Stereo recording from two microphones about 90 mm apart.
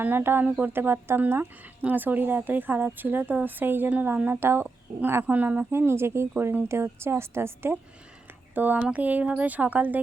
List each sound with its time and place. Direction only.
0.0 s speech: 25° right (ahead or behind)